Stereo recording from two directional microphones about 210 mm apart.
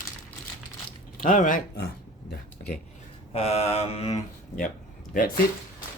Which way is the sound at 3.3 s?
30° left (ahead or behind).